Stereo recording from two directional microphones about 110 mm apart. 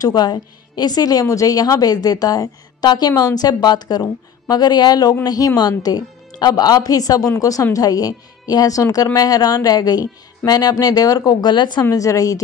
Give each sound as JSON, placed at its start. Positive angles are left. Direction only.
{"t": 0.0, "sound": "a woman's voice", "side_deg": 40}
{"t": 11.9, "sound": "a woman's voice", "side_deg": 30}